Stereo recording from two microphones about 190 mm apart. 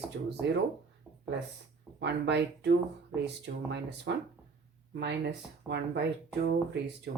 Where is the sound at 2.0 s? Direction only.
65° right (ahead or behind).